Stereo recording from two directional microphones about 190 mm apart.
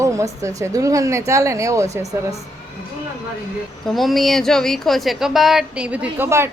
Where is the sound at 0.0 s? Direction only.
15° right (ahead or behind).